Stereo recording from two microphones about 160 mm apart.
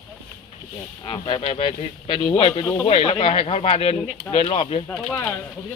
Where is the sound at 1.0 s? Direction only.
30° left (ahead or behind).